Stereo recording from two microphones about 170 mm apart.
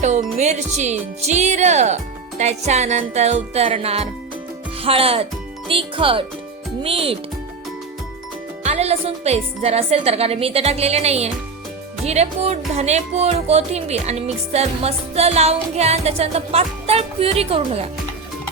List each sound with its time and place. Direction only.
0.0 s speech: 45° right (ahead or behind)
8.6 s speech: 40° right (ahead or behind)